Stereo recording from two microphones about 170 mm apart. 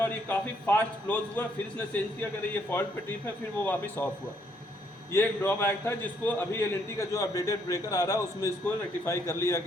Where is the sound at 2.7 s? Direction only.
15° left (ahead or behind).